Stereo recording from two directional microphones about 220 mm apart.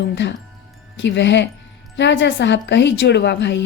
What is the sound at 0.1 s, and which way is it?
A woman's voice, 55° left (ahead or behind).